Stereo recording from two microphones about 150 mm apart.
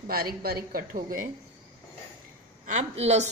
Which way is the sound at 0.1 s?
85° right.